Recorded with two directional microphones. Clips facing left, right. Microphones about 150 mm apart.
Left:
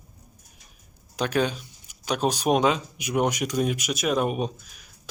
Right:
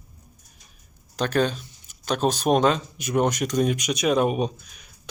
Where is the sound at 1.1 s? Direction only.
10° left (ahead or behind).